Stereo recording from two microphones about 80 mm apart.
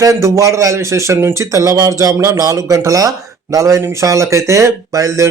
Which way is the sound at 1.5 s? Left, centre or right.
Right.